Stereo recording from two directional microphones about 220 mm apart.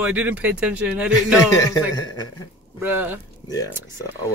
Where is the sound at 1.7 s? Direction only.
15° left (ahead or behind).